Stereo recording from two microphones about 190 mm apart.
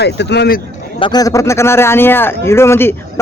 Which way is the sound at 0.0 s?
60° left (ahead or behind).